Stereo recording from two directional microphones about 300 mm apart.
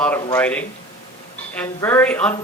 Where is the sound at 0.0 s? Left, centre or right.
Centre.